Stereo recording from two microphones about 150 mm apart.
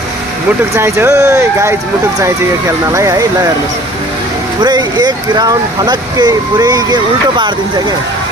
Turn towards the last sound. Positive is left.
turn(degrees=-30)  # may be behind; listen again after turning